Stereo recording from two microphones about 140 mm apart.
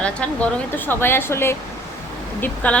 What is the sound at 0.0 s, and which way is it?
A woman's voice, 10° left (ahead or behind).